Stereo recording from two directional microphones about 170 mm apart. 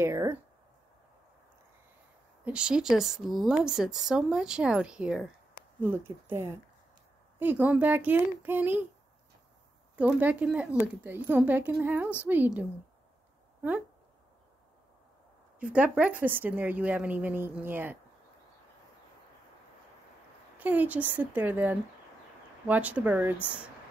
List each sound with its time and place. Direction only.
0.0 s a woman's voice: 15° right (ahead or behind)
2.4 s a woman's voice: 5° right (ahead or behind)
9.9 s a woman's voice: 5° right (ahead or behind)
15.6 s a woman's voice: 5° right (ahead or behind)
20.5 s a woman's voice: 10° right (ahead or behind)